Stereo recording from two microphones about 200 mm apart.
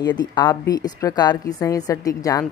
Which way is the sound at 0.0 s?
20° left (ahead or behind).